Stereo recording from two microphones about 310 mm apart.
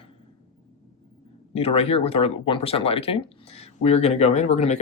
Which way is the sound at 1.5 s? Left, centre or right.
Centre.